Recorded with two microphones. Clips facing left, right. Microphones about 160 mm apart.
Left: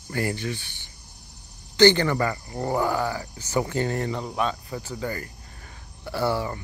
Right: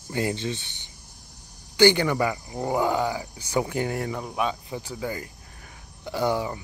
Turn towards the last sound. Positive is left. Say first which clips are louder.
# even
turn(degrees=-15)  # may be behind; listen again after turning